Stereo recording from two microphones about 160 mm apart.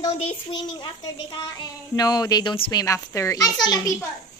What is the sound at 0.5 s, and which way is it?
A child's voice, 30° left (ahead or behind).